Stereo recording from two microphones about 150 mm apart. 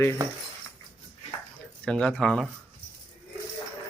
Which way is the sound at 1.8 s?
5° left (ahead or behind).